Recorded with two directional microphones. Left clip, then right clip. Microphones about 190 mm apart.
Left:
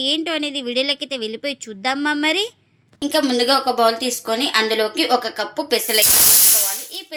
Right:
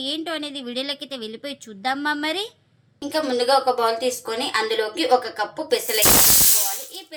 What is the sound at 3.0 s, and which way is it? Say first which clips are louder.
Speech: left 4 dB; 50° left (ahead or behind).